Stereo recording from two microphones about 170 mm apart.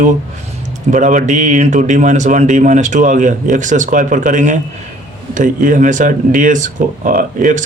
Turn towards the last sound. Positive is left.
turn(degrees=-50)  # may be behind; listen again after turning